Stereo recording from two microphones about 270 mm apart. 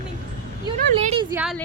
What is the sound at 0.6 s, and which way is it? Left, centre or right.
Speech, centre.